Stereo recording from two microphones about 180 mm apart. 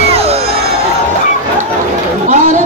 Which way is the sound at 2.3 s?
45° right (ahead or behind).